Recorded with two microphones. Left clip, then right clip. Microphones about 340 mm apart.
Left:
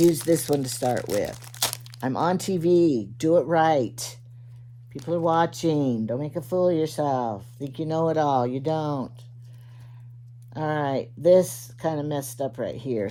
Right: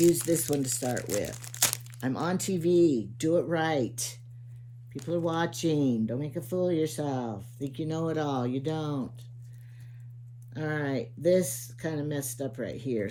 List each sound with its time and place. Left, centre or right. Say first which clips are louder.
0.3 s speech: left 6 dB; left
1.4 s crunch: left 1 dB; centre
2.0 s speech: left 8 dB; left
10.5 s speech: left 6 dB; centre